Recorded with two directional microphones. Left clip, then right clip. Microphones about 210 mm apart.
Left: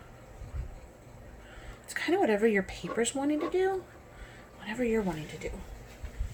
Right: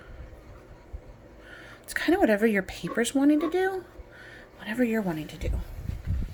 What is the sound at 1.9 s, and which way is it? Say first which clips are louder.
Speech: right 4 dB; 45° right (ahead or behind).